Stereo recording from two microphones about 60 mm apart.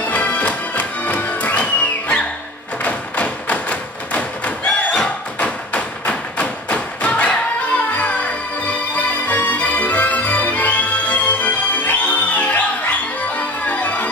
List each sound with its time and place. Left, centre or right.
0.0 s music: left
2.8 s thump: left
4.9 s a sound: centre